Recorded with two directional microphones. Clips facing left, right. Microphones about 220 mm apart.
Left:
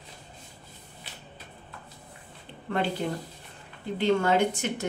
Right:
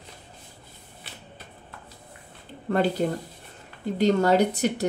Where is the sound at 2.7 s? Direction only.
40° right (ahead or behind).